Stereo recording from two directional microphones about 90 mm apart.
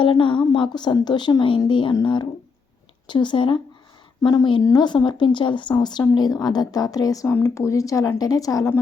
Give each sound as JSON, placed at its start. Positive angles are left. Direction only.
{"t": 0.0, "sound": "speech", "side_deg": 70}
{"t": 0.5, "sound": "speech", "side_deg": 60}
{"t": 4.2, "sound": "a woman's voice", "side_deg": 55}
{"t": 7.3, "sound": "a woman's voice", "side_deg": 30}